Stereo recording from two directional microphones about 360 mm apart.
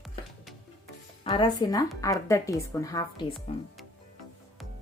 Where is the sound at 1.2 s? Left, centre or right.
Centre.